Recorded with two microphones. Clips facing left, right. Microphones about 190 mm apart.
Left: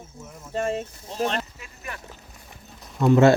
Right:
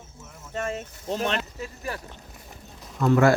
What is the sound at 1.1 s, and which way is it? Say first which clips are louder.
Speech: even; 65° right (ahead or behind).